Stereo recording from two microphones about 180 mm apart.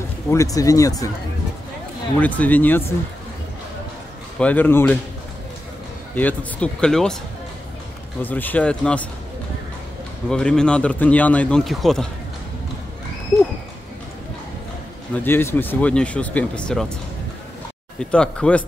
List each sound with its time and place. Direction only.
0.3 s speech: 20° left (ahead or behind)
2.1 s speech: 10° left (ahead or behind)
4.4 s speech: 10° left (ahead or behind)
6.1 s a man's voice: 10° left (ahead or behind)
8.2 s speech: 10° left (ahead or behind)
10.3 s a man's voice: 5° left (ahead or behind)
15.1 s speech: 10° left (ahead or behind)
17.9 s a man's voice: 5° left (ahead or behind)